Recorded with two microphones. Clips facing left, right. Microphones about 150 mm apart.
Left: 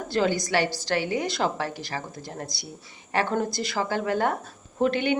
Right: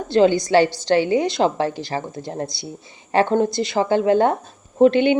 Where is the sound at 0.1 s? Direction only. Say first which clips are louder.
Right 9 dB; 25° right (ahead or behind).